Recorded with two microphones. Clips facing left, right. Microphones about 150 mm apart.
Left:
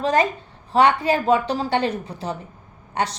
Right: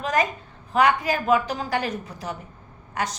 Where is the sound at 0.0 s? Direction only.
30° left (ahead or behind).